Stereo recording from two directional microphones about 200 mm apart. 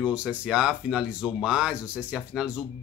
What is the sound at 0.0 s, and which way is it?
Speech, 5° right (ahead or behind).